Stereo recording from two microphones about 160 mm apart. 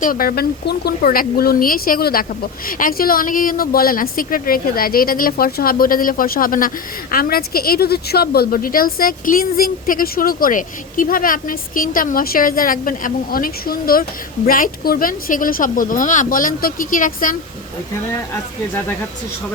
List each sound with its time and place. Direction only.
0.0 s speech: 65° left (ahead or behind)